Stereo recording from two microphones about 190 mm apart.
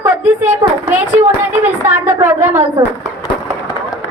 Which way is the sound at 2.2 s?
10° right (ahead or behind).